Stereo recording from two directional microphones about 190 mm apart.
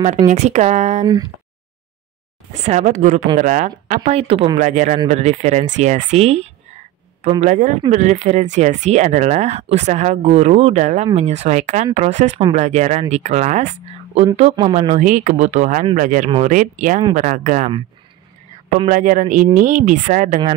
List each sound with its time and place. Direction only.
0.3 s speech: 35° right (ahead or behind)
2.6 s speech: 40° right (ahead or behind)
18.9 s speech: 45° right (ahead or behind)